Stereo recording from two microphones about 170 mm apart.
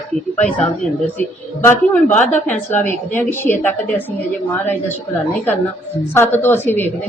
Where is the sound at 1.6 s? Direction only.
10° left (ahead or behind).